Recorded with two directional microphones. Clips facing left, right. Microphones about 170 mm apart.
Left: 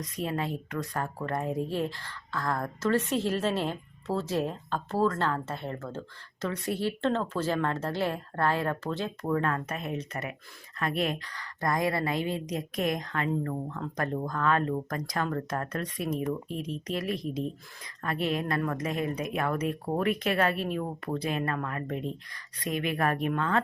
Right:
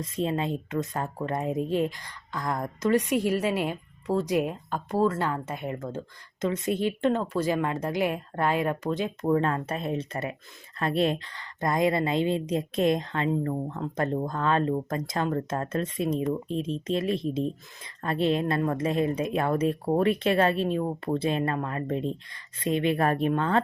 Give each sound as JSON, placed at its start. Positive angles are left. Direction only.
{"t": 0.0, "sound": "a woman's voice", "side_deg": -25}